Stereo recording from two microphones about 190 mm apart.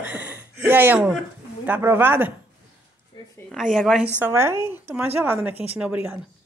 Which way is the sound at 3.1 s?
25° left (ahead or behind).